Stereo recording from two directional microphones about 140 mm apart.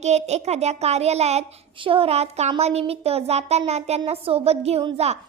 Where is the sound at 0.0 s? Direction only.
50° right (ahead or behind).